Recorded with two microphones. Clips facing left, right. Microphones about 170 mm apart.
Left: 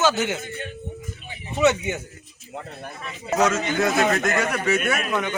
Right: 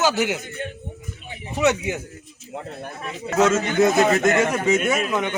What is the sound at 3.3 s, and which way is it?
Speech, 25° right (ahead or behind).